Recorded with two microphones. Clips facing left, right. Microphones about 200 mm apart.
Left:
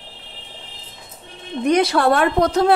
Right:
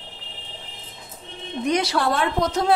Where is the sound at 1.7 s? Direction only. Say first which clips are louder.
Left 6 dB; 55° left (ahead or behind).